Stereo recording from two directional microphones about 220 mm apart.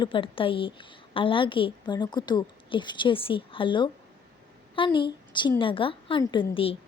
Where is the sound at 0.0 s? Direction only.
25° left (ahead or behind).